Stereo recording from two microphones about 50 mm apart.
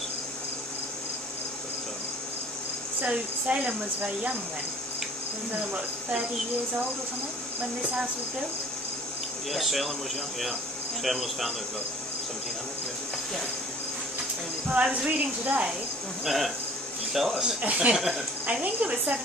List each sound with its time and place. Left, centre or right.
3.1 s speech: right
9.5 s speech: centre
11.0 s speech: centre
14.8 s speech: right
16.2 s speech: centre
17.6 s speech: right
17.9 s speech: centre
18.6 s speech: right